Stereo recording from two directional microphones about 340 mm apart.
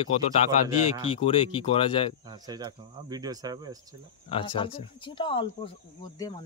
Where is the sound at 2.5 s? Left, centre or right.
Centre.